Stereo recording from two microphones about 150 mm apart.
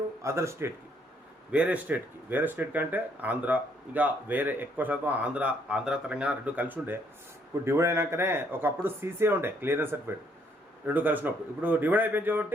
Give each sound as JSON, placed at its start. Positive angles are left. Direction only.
{"t": 0.2, "sound": "speech", "side_deg": -20}